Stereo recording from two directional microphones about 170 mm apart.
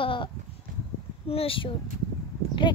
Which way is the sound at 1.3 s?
35° left (ahead or behind).